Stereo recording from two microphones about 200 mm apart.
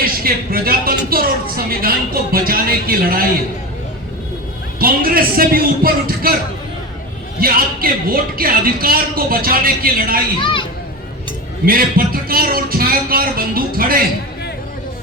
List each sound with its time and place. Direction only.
0.0 s a woman's voice: 45° right (ahead or behind)
4.8 s a woman's voice: 45° right (ahead or behind)
7.3 s a woman's voice: 45° right (ahead or behind)
10.4 s speech: 25° left (ahead or behind)
11.6 s a woman's voice: 45° right (ahead or behind)